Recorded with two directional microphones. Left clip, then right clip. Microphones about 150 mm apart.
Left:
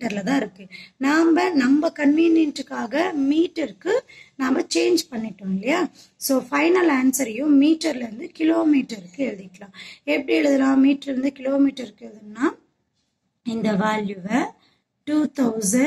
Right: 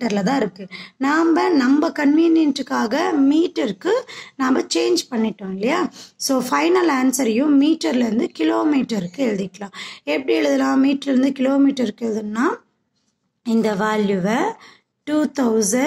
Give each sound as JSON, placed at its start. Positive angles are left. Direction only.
{"t": 0.0, "sound": "speech", "side_deg": -35}